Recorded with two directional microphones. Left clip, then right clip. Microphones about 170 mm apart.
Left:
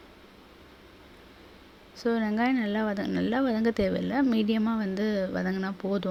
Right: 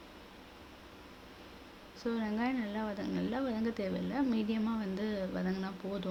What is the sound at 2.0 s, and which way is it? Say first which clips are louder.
Speech: left 9 dB; 40° left (ahead or behind).